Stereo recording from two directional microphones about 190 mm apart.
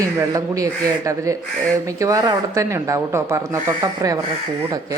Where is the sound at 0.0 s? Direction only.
15° right (ahead or behind).